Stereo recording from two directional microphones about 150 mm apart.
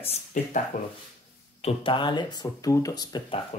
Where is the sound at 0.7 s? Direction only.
55° left (ahead or behind).